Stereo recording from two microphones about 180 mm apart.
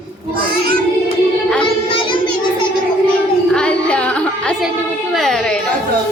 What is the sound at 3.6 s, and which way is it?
A woman's voice, 5° left (ahead or behind).